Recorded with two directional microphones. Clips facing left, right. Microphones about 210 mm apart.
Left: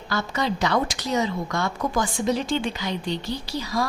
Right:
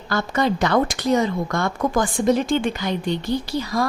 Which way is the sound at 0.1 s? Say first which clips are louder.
Right 5 dB; 50° right (ahead or behind).